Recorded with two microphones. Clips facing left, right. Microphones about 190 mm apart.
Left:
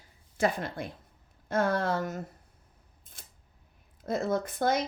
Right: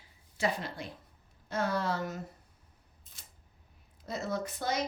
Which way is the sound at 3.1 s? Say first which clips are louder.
Left 7 dB; 55° left (ahead or behind).